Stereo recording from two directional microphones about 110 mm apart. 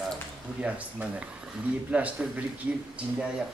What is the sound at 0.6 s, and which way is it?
A man's voice, 10° right (ahead or behind).